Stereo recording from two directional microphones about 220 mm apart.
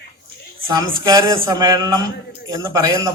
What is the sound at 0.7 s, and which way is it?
A man's voice, 15° right (ahead or behind).